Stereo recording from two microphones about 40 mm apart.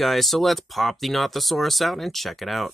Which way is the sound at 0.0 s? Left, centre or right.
Centre.